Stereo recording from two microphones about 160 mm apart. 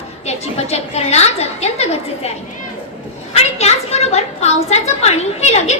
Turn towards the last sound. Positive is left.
turn(degrees=45)  # may be behind; listen again after turning